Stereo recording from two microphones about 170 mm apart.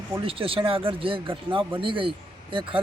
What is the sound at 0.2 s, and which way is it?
Speech, 35° right (ahead or behind).